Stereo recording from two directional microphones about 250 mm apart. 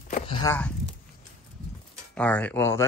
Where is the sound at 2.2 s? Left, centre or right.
Centre.